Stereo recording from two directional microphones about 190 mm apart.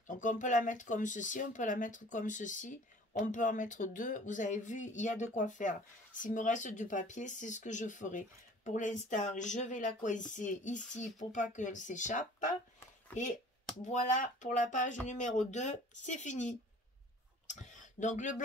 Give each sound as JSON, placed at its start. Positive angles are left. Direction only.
{"t": 0.0, "sound": "speech", "side_deg": 40}
{"t": 13.8, "sound": "speech", "side_deg": 40}
{"t": 17.5, "sound": "a sound", "side_deg": 40}